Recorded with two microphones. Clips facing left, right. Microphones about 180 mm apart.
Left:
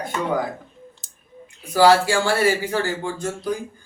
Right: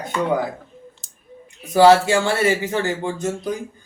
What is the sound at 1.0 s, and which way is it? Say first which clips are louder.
Scissors: even; centre (ahead or behind).